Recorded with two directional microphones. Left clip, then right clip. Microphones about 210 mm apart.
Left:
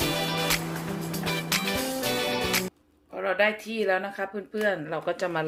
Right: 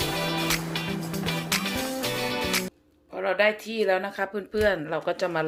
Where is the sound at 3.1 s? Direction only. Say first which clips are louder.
Right 1 dB; 15° right (ahead or behind).